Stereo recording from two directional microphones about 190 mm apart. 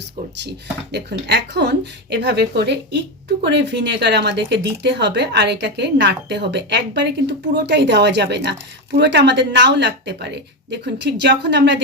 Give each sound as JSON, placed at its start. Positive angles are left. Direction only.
{"t": 0.4, "sound": "speech", "side_deg": -60}